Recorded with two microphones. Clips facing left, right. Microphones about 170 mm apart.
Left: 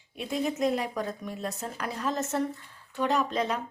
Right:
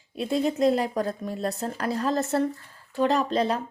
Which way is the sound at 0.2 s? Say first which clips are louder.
Right 5 dB; 35° right (ahead or behind).